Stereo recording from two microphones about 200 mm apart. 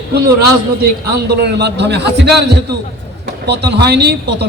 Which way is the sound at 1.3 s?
55° right (ahead or behind).